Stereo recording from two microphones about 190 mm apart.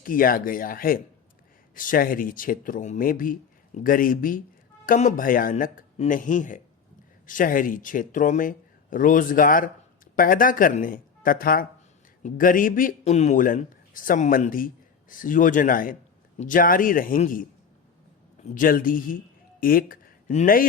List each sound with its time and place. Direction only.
0.0 s a man's voice: 45° left (ahead or behind)
18.4 s speech: 45° left (ahead or behind)